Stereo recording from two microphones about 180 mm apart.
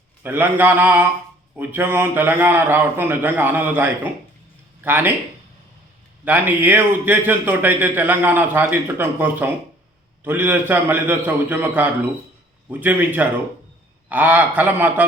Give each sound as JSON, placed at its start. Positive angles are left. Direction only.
{"t": 0.2, "sound": "a man's voice", "side_deg": -10}
{"t": 6.2, "sound": "a man's voice", "side_deg": -10}